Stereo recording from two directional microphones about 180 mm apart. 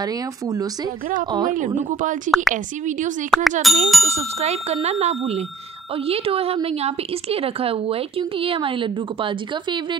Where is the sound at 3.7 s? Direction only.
Centre (ahead or behind).